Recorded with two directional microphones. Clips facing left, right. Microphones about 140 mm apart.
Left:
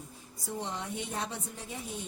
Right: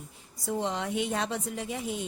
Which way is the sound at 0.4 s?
90° right.